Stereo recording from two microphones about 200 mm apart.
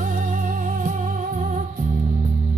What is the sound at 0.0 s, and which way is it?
Music, 40° right (ahead or behind).